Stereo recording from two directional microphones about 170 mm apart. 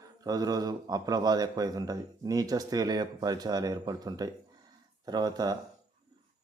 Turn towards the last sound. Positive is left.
turn(degrees=-25)  # may be behind; listen again after turning